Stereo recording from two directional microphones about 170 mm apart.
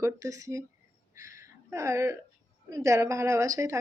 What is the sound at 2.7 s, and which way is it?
Speech, 20° right (ahead or behind).